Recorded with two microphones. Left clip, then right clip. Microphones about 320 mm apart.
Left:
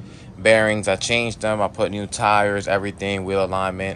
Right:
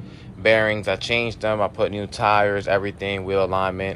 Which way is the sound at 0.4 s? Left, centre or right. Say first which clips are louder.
Left 2 dB; centre.